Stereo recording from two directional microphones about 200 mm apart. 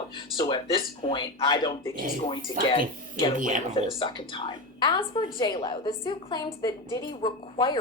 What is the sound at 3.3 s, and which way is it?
Speech, 40° right (ahead or behind).